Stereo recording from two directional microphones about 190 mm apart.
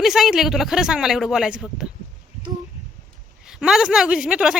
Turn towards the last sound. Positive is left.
turn(degrees=-5)  # may be behind; listen again after turning